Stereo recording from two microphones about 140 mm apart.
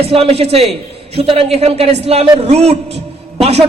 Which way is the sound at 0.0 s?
45° right (ahead or behind).